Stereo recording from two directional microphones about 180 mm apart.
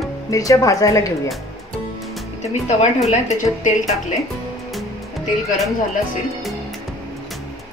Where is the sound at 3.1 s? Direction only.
40° left (ahead or behind).